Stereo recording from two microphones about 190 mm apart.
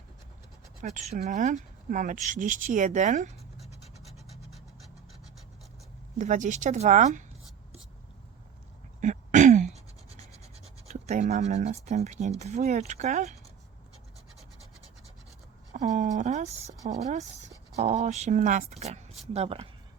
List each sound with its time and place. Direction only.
0.8 s speech: 40° right (ahead or behind)
6.1 s speech: 40° right (ahead or behind)
9.0 s a sound: 40° right (ahead or behind)
10.8 s speech: 35° right (ahead or behind)
15.7 s speech: 40° right (ahead or behind)